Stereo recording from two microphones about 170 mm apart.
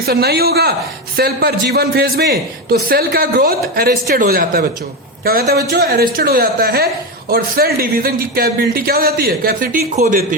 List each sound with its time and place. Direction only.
0.0 s a woman's voice: 70° right (ahead or behind)